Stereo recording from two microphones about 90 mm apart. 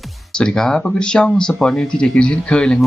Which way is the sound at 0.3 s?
10° left (ahead or behind).